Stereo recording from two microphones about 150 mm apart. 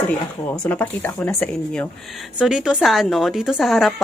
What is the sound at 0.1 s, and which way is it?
Speech, 10° left (ahead or behind).